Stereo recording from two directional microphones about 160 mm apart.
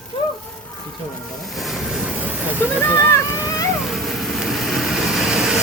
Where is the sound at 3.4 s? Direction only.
20° left (ahead or behind).